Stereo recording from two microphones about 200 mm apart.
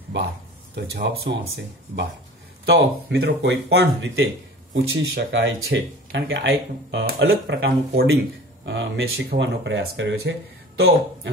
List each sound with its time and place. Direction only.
0.1 s speech: 60° right (ahead or behind)
2.6 s speech: 55° right (ahead or behind)
4.7 s speech: 55° right (ahead or behind)